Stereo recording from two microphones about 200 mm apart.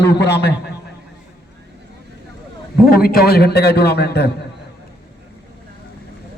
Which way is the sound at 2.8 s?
50° left (ahead or behind).